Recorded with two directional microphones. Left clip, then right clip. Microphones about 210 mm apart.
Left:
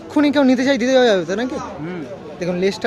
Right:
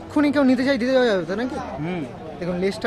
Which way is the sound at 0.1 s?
15° left (ahead or behind).